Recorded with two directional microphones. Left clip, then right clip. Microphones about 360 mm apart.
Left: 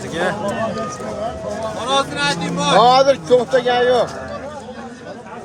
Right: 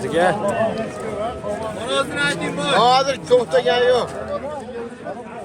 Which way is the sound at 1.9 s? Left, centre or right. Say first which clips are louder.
Left 2 dB; left.